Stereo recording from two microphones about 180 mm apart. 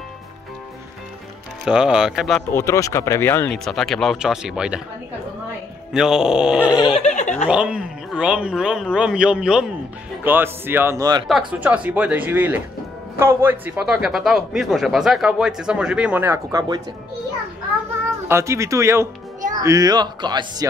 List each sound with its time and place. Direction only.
1.6 s a man's voice: 5° right (ahead or behind)
2.5 s a man's voice: 15° left (ahead or behind); by 4.8 s 5° right (ahead or behind)
5.9 s a man's voice: 5° right (ahead or behind)
6.7 s a sound: 25° left (ahead or behind)
7.0 s snicker: 40° left (ahead or behind)
7.4 s a man's voice: 5° right (ahead or behind)
11.2 s a man's voice: 5° right (ahead or behind)
18.3 s speech: 15° right (ahead or behind)